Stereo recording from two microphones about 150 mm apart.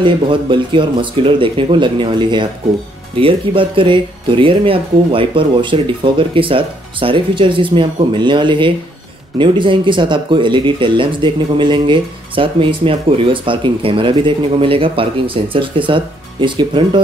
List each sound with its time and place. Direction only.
0.0 s speech: 35° right (ahead or behind)